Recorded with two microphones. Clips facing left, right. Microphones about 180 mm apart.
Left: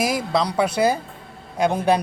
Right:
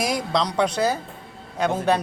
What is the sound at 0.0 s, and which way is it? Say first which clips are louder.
Speech: left 2 dB; 5° left (ahead or behind).